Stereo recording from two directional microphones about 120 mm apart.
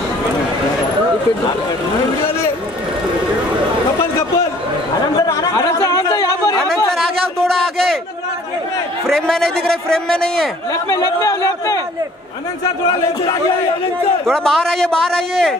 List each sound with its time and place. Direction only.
5.2 s chatter: 30° left (ahead or behind)
7.3 s a sound: 5° left (ahead or behind)
9.0 s a man's voice: 5° left (ahead or behind)
10.7 s speech: 30° left (ahead or behind)
14.2 s a man's voice: 5° left (ahead or behind)